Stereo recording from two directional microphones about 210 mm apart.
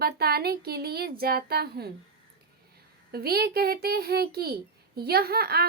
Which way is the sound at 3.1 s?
50° right (ahead or behind).